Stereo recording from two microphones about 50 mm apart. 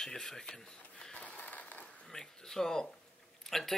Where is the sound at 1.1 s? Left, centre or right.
Left.